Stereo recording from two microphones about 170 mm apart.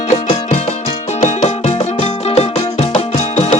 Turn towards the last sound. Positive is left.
turn(degrees=40)  # may be behind; listen again after turning